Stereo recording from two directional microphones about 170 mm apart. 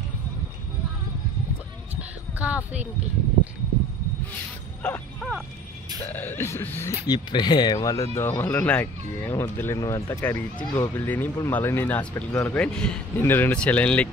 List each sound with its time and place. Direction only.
2.0 s a sound: 10° right (ahead or behind)
4.8 s speech: 5° left (ahead or behind)
7.1 s speech: 25° left (ahead or behind); by 14.0 s 10° left (ahead or behind)